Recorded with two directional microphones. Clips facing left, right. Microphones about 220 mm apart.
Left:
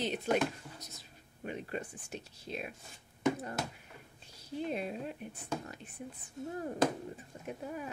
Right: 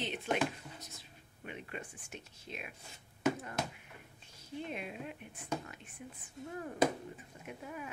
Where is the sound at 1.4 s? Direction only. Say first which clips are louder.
Left 6 dB; 35° left (ahead or behind).